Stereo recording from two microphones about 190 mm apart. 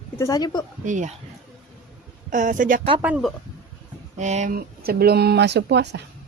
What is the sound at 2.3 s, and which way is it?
Speech, 40° right (ahead or behind).